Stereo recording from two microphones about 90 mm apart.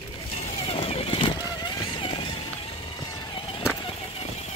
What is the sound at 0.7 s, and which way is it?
Vehicle, 90° left.